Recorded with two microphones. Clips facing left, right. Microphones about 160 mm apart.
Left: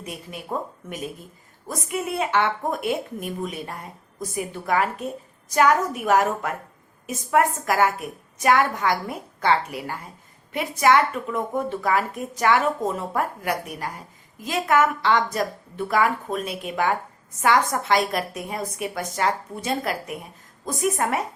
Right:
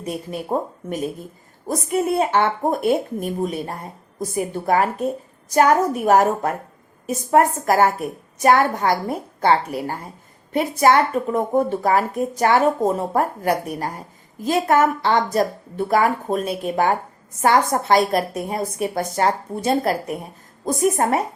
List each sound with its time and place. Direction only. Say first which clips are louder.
0.0 s a woman's voice: right 8 dB; 35° right (ahead or behind)